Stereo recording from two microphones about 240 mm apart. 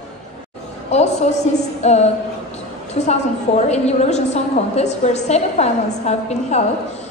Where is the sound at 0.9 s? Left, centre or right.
Left.